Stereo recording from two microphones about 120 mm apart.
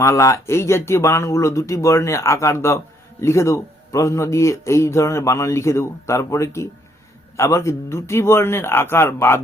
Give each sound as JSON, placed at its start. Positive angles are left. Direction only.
{"t": 0.0, "sound": "speech", "side_deg": 25}